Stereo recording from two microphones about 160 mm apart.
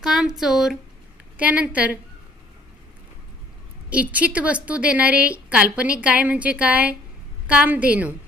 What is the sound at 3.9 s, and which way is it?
A woman's voice, 10° right (ahead or behind).